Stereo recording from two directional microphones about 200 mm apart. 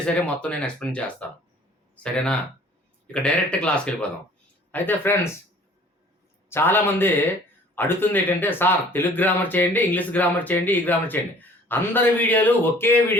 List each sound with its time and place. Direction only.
0.0 s speech: 5° left (ahead or behind)
2.1 s speech: 5° left (ahead or behind)
6.5 s speech: 10° left (ahead or behind)